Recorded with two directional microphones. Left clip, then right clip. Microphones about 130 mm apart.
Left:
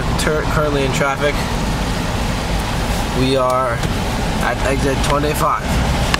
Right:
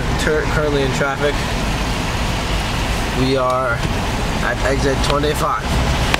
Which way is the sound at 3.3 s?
10° left (ahead or behind).